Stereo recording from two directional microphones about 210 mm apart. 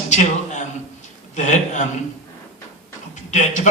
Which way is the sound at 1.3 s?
35° left (ahead or behind).